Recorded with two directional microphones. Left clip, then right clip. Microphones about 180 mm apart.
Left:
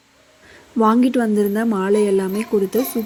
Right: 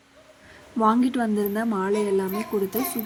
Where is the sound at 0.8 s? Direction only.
20° left (ahead or behind).